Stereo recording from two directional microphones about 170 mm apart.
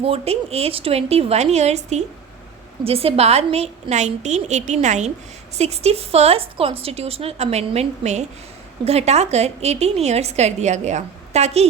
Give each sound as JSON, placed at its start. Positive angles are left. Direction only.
{"t": 0.0, "sound": "a woman's voice", "side_deg": -35}